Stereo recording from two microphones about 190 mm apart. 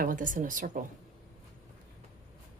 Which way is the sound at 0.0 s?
45° right (ahead or behind).